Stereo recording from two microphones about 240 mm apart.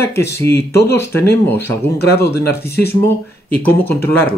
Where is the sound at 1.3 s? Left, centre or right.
Centre.